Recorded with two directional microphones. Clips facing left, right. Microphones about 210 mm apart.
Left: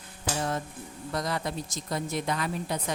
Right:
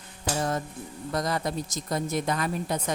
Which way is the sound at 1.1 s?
45° right (ahead or behind).